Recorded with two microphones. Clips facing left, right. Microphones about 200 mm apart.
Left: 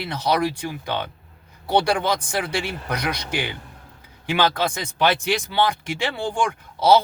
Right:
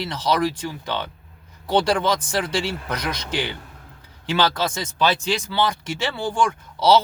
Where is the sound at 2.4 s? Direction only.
10° left (ahead or behind).